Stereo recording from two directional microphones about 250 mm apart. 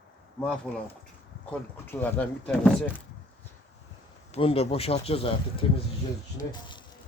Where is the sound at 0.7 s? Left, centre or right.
Centre.